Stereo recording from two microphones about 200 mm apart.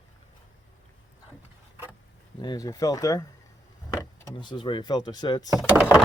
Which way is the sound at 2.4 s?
20° left (ahead or behind).